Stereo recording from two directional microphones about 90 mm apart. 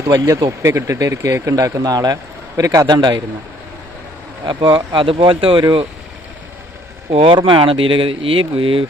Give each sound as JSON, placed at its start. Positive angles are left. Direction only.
{"t": 0.1, "sound": "a man's voice", "side_deg": -40}
{"t": 4.4, "sound": "speech", "side_deg": -55}
{"t": 7.1, "sound": "speech", "side_deg": -90}